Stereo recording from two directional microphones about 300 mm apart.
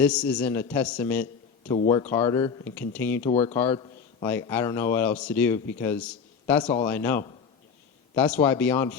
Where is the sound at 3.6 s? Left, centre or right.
Centre.